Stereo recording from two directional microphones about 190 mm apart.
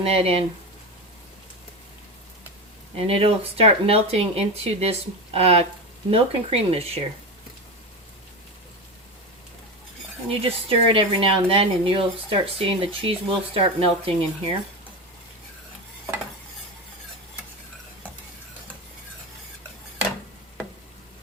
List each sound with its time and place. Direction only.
0.1 s speech: 30° right (ahead or behind)
2.9 s speech: 30° right (ahead or behind)
10.2 s speech: 30° right (ahead or behind)